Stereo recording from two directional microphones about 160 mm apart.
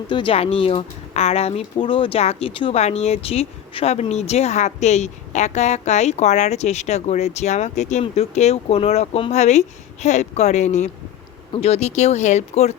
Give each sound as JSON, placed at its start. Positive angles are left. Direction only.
{"t": 0.1, "sound": "speech", "side_deg": 30}